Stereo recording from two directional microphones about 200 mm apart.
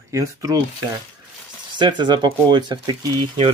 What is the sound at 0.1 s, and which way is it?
Speech, 15° right (ahead or behind).